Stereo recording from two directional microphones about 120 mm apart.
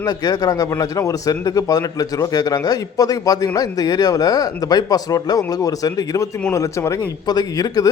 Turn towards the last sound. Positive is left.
turn(degrees=30)  # may be behind; listen again after turning